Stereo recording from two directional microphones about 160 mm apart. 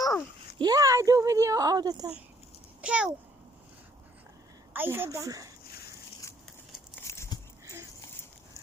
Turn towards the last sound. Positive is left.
turn(degrees=20)  # may be behind; listen again after turning